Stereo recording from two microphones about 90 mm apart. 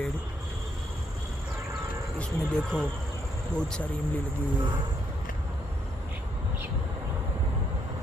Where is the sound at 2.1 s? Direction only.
10° left (ahead or behind).